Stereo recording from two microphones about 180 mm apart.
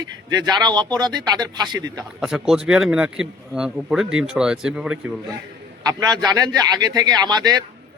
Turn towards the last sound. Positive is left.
turn(degrees=-20)  # may be behind; listen again after turning